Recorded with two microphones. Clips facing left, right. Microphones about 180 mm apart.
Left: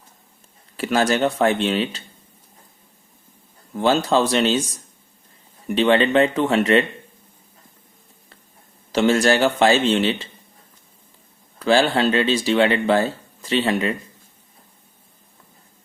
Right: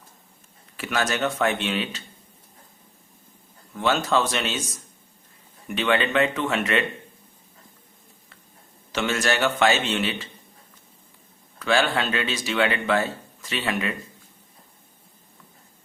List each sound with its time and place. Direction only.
0.8 s speech: 30° left (ahead or behind)
3.7 s speech: 30° left (ahead or behind)
5.6 s speech: 30° left (ahead or behind)
8.9 s speech: 35° left (ahead or behind)
11.6 s speech: 30° left (ahead or behind)